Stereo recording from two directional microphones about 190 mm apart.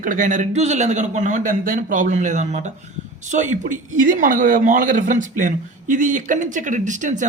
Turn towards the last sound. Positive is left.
turn(degrees=-40)  # may be behind; listen again after turning